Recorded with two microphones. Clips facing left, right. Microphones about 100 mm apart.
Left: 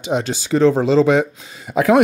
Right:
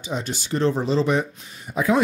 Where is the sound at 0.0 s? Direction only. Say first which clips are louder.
Left 8 dB; 85° left.